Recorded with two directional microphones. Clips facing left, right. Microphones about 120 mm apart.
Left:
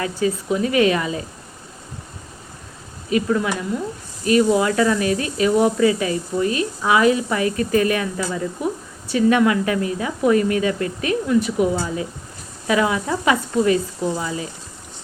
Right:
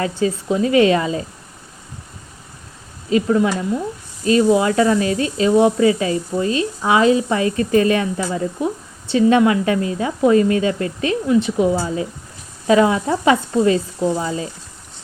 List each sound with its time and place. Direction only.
0.0 s a woman's voice: 30° right (ahead or behind)
3.1 s a woman's voice: 30° right (ahead or behind)